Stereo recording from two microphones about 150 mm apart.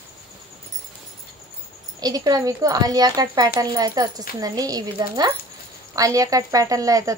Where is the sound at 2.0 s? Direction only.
25° right (ahead or behind).